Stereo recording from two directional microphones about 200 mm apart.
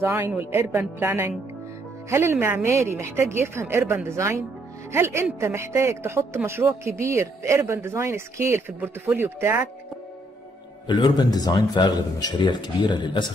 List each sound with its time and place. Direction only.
0.0 s speech: 10° right (ahead or behind)
10.9 s speech: 20° left (ahead or behind)